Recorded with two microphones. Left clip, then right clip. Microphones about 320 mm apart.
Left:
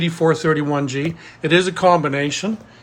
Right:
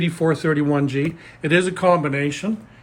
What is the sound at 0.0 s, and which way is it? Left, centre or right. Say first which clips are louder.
Speech: left 3 dB; centre.